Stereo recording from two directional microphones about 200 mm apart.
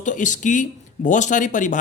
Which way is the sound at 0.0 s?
40° left (ahead or behind).